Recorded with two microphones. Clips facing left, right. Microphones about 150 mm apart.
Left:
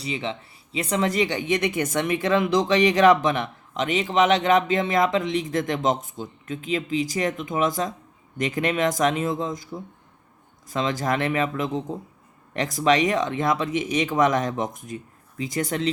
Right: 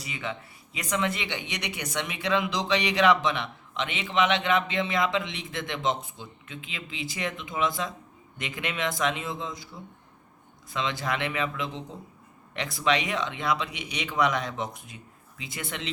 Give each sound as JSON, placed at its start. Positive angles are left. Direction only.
{"t": 0.0, "sound": "speech", "side_deg": 30}